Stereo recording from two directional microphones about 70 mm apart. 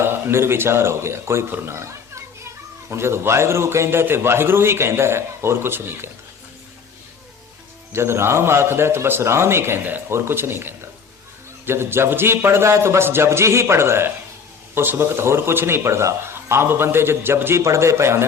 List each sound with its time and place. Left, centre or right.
0.0 s speech: right
7.9 s speech: right